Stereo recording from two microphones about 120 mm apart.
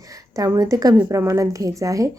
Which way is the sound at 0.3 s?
30° right (ahead or behind).